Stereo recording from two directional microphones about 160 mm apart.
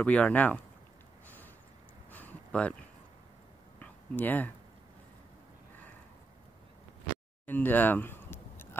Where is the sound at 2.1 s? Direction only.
10° left (ahead or behind).